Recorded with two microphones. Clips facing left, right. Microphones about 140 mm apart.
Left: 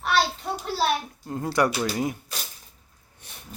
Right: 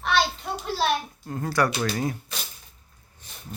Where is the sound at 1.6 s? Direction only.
10° left (ahead or behind).